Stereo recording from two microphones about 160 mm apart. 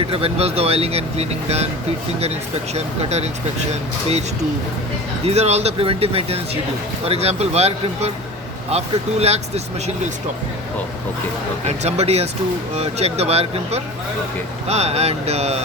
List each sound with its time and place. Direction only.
0.0 s speech: 35° right (ahead or behind)
2.7 s speech: 40° right (ahead or behind)
5.2 s speech: 40° right (ahead or behind)
11.8 s speech: 40° right (ahead or behind)